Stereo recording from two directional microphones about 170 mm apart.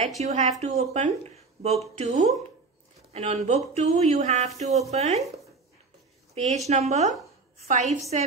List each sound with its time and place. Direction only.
0.2 s speech: 45° right (ahead or behind)
6.3 s a woman's voice: 40° right (ahead or behind)